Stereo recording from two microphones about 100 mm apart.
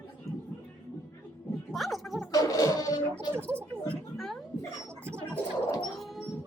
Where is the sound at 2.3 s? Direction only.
35° left (ahead or behind).